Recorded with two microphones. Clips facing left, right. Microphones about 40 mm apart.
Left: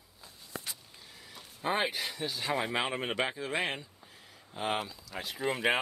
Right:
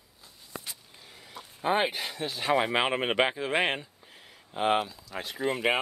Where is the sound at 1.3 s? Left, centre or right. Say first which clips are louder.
Right 5 dB; centre.